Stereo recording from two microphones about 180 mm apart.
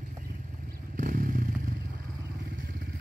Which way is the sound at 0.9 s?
45° right (ahead or behind).